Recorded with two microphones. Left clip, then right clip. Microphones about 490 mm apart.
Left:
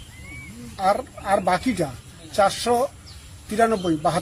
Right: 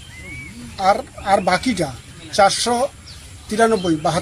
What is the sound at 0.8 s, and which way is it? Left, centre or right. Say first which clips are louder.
Speech: right 4 dB; left.